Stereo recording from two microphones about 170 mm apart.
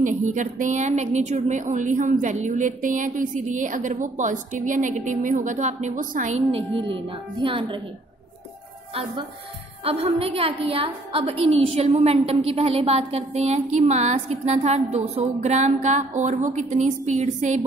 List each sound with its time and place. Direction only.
0.0 s speech: 45° right (ahead or behind)
6.5 s a woman's voice: 30° right (ahead or behind)
9.8 s a woman's voice: 35° right (ahead or behind)